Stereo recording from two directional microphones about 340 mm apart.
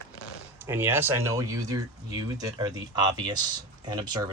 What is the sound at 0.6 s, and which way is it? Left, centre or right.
Speech, centre.